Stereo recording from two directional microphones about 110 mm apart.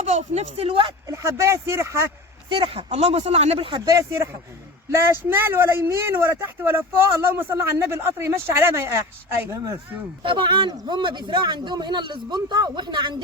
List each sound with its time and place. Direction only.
0.0 s speech: 90° right; by 0.9 s 60° right (ahead or behind)
1.0 s speech: 25° right (ahead or behind)
2.5 s speech: 55° right (ahead or behind)
3.7 s speech: 35° right (ahead or behind)
10.2 s speech: 45° right (ahead or behind)